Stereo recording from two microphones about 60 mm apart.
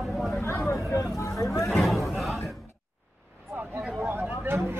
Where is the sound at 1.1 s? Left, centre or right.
Left.